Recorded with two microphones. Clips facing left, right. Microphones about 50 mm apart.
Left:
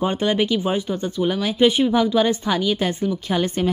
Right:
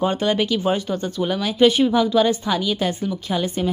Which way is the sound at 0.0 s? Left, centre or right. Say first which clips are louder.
Even; left.